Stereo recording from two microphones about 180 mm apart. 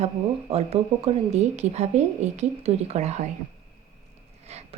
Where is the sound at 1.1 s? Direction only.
35° right (ahead or behind).